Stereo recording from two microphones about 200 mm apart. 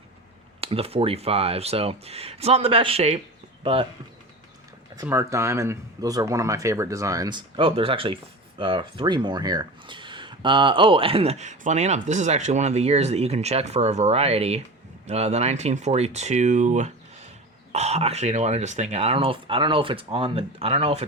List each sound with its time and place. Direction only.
0.6 s speech: 30° right (ahead or behind)
4.9 s speech: 15° right (ahead or behind); by 21.1 s 30° right (ahead or behind)